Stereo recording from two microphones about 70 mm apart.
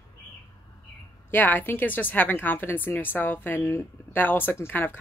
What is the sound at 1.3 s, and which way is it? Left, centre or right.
A woman's voice, left.